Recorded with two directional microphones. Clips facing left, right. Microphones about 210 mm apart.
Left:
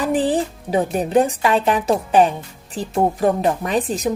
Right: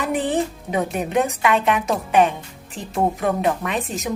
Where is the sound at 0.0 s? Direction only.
35° left (ahead or behind).